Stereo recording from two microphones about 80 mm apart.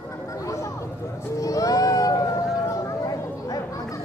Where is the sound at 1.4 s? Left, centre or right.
Left.